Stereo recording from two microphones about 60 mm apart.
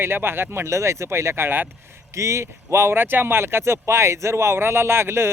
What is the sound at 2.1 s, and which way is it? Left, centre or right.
Speech, right.